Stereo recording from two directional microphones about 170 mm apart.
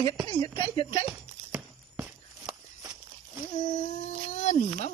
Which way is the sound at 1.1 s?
10° right (ahead or behind).